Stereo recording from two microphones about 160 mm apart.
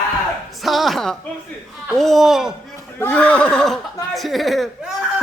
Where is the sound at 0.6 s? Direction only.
Centre (ahead or behind).